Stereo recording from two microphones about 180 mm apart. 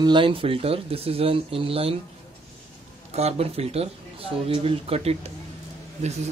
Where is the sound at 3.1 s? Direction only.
35° right (ahead or behind).